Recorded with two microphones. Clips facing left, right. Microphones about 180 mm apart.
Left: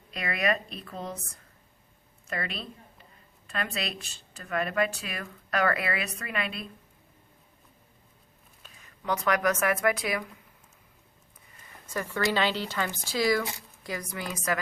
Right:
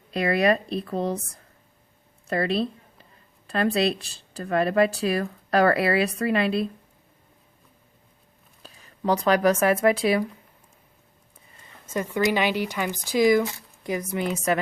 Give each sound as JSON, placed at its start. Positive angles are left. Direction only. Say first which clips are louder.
{"t": 0.1, "sound": "speech", "louder": "right 8 dB", "side_deg": -35}
{"t": 2.2, "sound": "speech", "louder": "right 11 dB", "side_deg": -35}
{"t": 8.6, "sound": "speech", "louder": "right 8 dB", "side_deg": -35}
{"t": 11.9, "sound": "a woman's voice", "louder": "right 5 dB", "side_deg": -20}